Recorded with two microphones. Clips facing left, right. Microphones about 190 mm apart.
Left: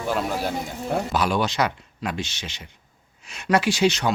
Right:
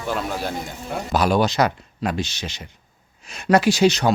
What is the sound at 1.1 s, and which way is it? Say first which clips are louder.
Speech: right 9 dB; 40° right (ahead or behind).